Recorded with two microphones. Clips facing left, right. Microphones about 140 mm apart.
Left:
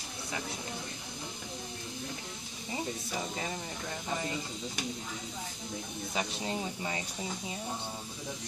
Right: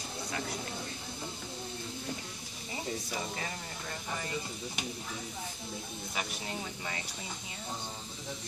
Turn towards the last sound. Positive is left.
turn(degrees=20)  # may be behind; listen again after turning